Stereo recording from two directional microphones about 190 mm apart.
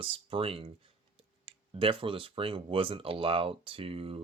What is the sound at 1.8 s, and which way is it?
Speech, 25° right (ahead or behind).